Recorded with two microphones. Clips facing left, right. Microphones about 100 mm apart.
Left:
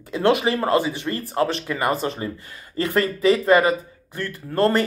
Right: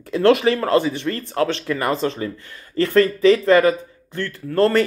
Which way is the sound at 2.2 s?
20° left (ahead or behind).